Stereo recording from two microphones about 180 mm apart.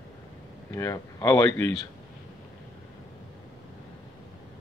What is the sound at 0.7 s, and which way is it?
Speech, 15° left (ahead or behind).